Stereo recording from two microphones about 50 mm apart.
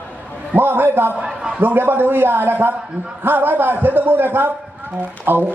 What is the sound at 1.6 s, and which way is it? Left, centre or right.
A man's voice, right.